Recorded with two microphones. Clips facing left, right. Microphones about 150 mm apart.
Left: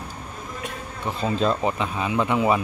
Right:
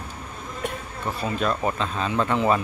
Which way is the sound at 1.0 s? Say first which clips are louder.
Left 3 dB; 25° left (ahead or behind).